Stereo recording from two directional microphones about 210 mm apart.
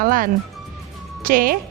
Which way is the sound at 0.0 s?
40° right (ahead or behind).